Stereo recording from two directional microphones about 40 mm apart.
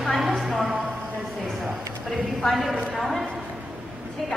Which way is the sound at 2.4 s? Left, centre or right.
Centre.